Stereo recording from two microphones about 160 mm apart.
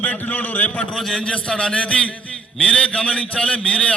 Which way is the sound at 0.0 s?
10° left (ahead or behind).